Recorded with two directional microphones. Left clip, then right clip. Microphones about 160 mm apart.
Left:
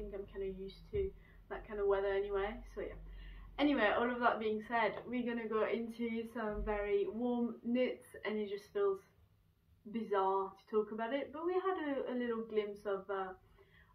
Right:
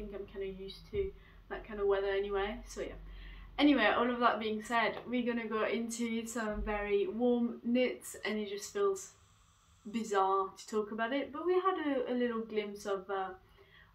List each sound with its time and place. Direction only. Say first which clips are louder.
0.1 s a woman's voice: right 3 dB; 15° right (ahead or behind)
9.9 s a woman's voice: right 4 dB; 15° right (ahead or behind)